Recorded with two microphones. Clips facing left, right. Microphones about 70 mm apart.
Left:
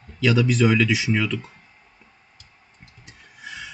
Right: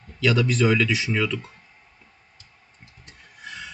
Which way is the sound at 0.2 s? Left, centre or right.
Centre.